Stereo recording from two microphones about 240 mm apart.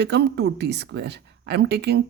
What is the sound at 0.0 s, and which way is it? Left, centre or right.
Speech, right.